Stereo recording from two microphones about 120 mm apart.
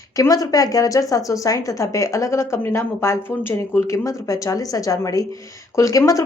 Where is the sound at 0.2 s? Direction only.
30° left (ahead or behind).